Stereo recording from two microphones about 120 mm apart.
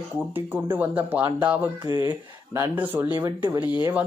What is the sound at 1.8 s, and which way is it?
Speech, 35° right (ahead or behind).